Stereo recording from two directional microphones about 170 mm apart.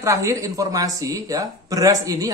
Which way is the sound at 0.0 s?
20° right (ahead or behind).